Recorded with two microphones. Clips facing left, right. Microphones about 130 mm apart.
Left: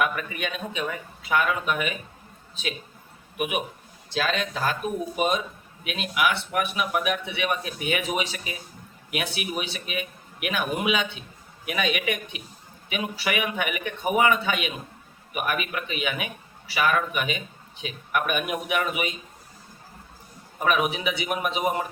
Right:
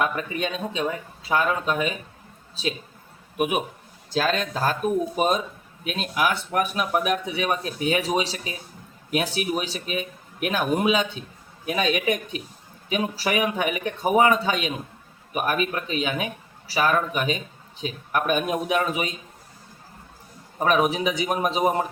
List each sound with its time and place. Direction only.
0.0 s a man's voice: 30° right (ahead or behind)
3.3 s a man's voice: 40° right (ahead or behind)
20.6 s a man's voice: 35° right (ahead or behind)